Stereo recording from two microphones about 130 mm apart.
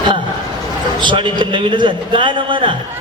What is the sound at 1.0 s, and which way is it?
A man's voice, 40° right (ahead or behind).